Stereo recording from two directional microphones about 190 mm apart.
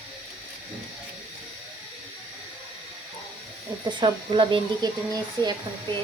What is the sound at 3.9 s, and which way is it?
Speech, 25° right (ahead or behind).